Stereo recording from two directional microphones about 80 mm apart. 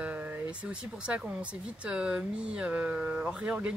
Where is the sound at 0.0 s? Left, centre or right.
Centre.